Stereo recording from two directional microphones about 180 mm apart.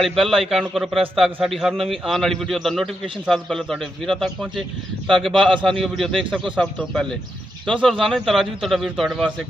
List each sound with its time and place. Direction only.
0.0 s a man's voice: centre (ahead or behind)